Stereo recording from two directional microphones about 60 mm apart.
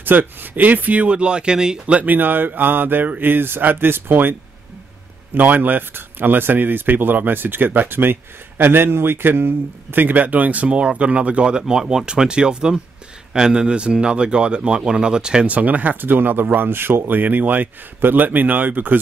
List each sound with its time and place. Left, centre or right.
0.0 s speech: right; by 2.0 s centre
2.0 s a man's voice: right; by 15.5 s centre
15.5 s speech: right